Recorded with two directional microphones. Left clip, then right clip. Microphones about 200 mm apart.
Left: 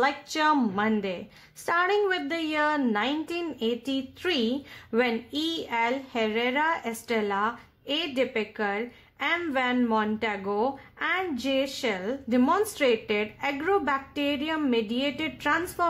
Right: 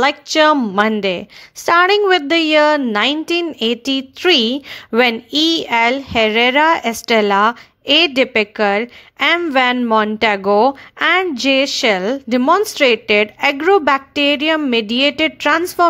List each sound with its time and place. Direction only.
0.0 s a woman's voice: 35° right (ahead or behind)